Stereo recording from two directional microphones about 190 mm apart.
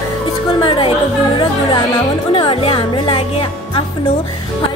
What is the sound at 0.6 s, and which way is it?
Speech, 25° left (ahead or behind).